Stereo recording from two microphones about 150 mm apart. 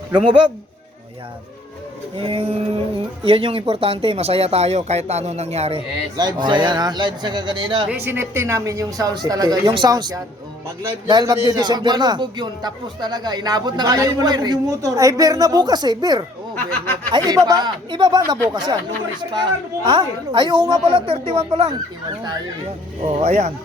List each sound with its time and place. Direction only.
0.1 s a woman's voice: 35° right (ahead or behind)
2.1 s a woman's voice: 40° right (ahead or behind)
6.1 s speech: 30° right (ahead or behind)
7.9 s speech: 15° right (ahead or behind)
16.6 s speech: 15° left (ahead or behind)
17.1 s a woman's voice: 25° right (ahead or behind)
23.2 s speech: 45° right (ahead or behind)